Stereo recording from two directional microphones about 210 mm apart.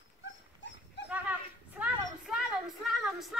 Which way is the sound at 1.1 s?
5° right (ahead or behind).